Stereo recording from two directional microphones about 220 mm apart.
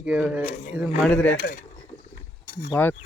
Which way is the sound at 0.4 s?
35° left (ahead or behind).